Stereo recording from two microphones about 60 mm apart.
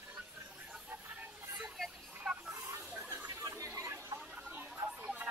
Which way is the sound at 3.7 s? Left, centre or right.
Right.